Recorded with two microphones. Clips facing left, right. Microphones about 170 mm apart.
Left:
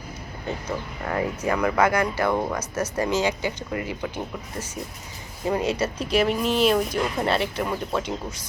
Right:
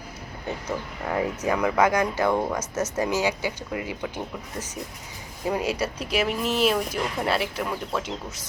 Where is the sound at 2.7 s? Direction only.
20° right (ahead or behind).